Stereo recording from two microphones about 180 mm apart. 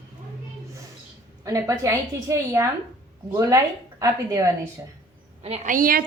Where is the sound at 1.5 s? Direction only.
20° right (ahead or behind).